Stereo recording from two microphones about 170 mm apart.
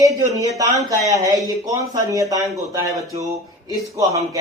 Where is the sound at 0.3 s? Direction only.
20° right (ahead or behind).